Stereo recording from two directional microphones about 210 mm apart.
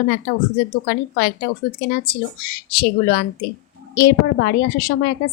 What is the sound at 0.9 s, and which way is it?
A woman's voice, 45° left (ahead or behind).